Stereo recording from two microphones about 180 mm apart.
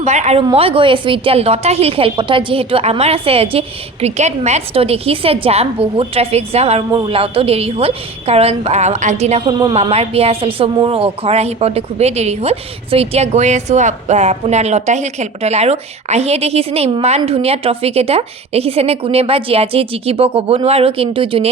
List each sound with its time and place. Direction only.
0.0 s a woman's voice: 40° right (ahead or behind)